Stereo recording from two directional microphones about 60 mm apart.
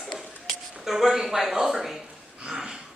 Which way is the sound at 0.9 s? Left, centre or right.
Centre.